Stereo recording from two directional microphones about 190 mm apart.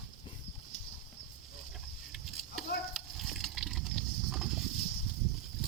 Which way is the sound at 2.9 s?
Centre (ahead or behind).